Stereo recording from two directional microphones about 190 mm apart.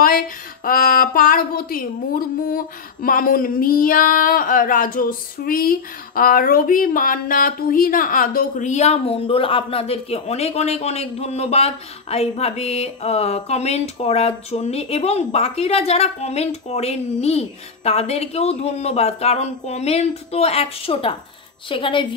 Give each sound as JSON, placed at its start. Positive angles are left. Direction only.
{"t": 0.7, "sound": "a woman's voice", "side_deg": 45}